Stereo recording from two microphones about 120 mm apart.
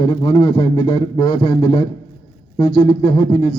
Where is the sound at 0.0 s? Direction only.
40° left (ahead or behind).